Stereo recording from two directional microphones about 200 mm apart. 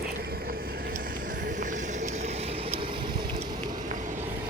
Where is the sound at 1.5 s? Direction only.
40° right (ahead or behind).